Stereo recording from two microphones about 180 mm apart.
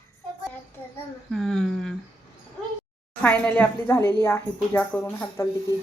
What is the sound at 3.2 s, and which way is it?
Speech, 10° left (ahead or behind).